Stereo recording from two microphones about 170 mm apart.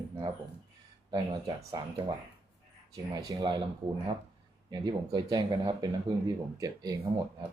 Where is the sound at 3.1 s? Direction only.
20° right (ahead or behind).